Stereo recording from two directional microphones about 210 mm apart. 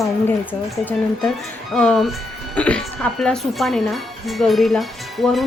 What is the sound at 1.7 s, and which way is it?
Speech, centre (ahead or behind).